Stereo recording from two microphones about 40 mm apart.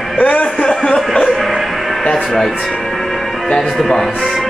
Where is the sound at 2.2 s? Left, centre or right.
Centre.